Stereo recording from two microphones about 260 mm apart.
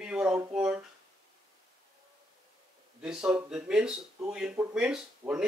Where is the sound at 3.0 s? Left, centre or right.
Centre.